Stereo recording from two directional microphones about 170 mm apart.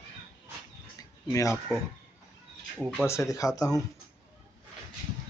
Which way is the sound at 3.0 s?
15° left (ahead or behind).